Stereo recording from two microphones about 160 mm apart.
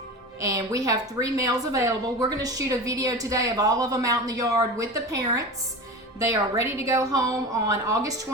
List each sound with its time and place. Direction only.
0.4 s a woman's voice: 20° right (ahead or behind)